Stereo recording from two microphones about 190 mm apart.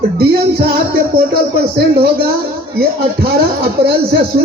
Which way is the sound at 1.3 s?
55° right (ahead or behind).